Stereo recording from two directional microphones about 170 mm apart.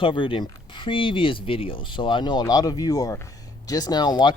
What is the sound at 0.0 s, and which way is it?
Speech, 30° left (ahead or behind).